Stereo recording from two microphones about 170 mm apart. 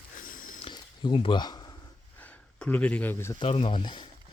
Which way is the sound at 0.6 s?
25° left (ahead or behind).